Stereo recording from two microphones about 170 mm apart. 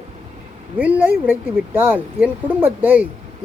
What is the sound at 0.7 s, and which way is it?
Speech, 10° right (ahead or behind).